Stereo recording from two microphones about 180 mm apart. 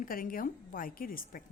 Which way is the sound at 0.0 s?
50° left (ahead or behind).